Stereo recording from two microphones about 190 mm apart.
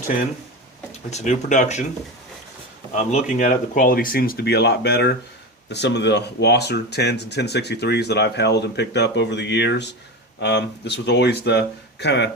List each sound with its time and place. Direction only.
1.1 s speech: 40° left (ahead or behind)
2.9 s speech: 40° left (ahead or behind); by 12.3 s 65° left (ahead or behind)